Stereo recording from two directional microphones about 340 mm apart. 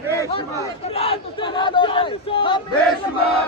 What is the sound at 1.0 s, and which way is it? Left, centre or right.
Battle cry, centre.